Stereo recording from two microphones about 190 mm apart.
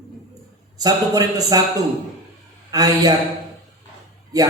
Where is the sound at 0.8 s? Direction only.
20° right (ahead or behind).